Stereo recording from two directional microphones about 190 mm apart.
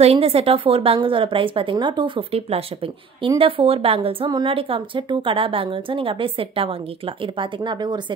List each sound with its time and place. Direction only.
0.0 s speech: 30° right (ahead or behind)